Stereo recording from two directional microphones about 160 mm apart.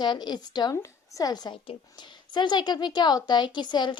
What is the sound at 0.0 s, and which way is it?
A woman's voice, 25° left (ahead or behind).